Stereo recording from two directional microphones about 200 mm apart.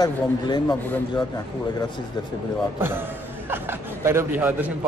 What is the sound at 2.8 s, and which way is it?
A man's voice, 10° right (ahead or behind).